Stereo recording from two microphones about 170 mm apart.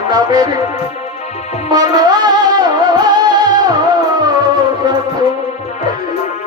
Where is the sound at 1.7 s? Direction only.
25° right (ahead or behind).